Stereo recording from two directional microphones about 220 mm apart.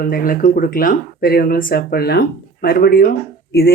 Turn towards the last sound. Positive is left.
turn(degrees=40)  # may be behind; listen again after turning